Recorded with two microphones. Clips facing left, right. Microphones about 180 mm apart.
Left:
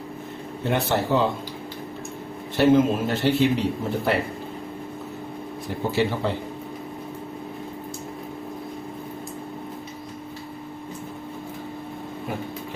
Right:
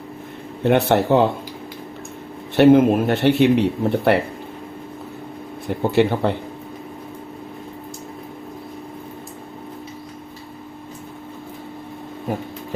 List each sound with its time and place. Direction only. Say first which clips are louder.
0.6 s speech: right 7 dB; 65° right (ahead or behind)
2.6 s speech: right 6 dB; 60° right (ahead or behind)
5.6 s speech: right 6 dB; 60° right (ahead or behind)